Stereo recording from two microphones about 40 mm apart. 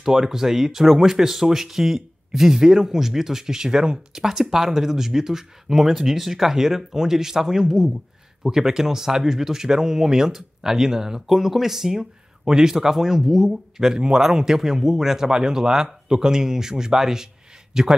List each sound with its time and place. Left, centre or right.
0.0 s speech: centre